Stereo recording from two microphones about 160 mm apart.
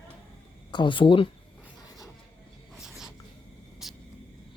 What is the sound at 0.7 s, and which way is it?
Speech, 30° left (ahead or behind).